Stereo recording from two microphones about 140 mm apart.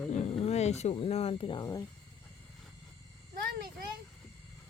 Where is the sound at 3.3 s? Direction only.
90° right.